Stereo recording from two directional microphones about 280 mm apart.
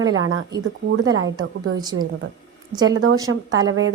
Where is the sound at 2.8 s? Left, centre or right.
Right.